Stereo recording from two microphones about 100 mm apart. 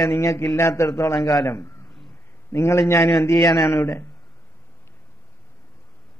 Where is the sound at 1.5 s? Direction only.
30° left (ahead or behind).